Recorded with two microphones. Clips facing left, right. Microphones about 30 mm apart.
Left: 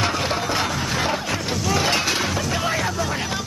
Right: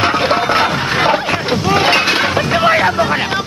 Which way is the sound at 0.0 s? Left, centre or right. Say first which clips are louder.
Right 9 dB; right.